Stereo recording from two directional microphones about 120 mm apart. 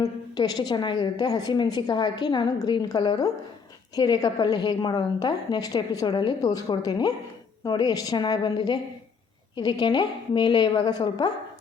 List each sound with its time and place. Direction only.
0.0 s a woman's voice: 35° left (ahead or behind)